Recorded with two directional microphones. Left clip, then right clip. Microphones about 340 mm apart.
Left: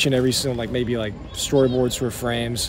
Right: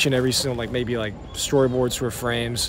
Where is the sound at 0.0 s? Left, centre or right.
Centre.